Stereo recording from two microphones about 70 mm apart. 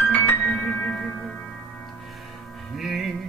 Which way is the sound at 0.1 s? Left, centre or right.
Left.